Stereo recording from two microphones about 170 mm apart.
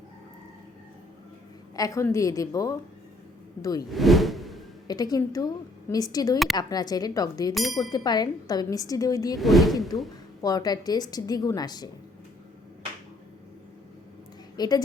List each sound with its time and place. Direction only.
1.7 s speech: 20° left (ahead or behind)
3.8 s whoosh: centre (ahead or behind)
4.9 s speech: 20° left (ahead or behind)
7.5 s speech: centre (ahead or behind)
7.8 s speech: 25° left (ahead or behind)
9.4 s speech: centre (ahead or behind)
10.4 s speech: 20° left (ahead or behind)
14.5 s a woman's voice: 25° left (ahead or behind)